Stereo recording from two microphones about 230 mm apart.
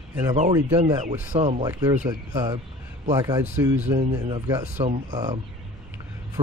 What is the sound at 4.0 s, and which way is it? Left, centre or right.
Speech, right.